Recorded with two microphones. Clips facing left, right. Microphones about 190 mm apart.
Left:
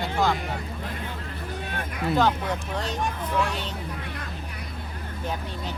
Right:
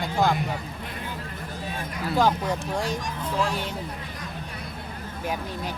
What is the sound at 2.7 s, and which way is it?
Speech, 10° right (ahead or behind).